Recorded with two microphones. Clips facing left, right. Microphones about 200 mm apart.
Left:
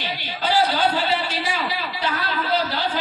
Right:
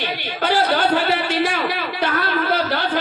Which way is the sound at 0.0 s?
60° right (ahead or behind).